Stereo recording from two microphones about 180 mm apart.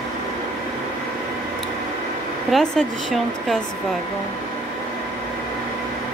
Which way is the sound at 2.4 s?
Centre (ahead or behind).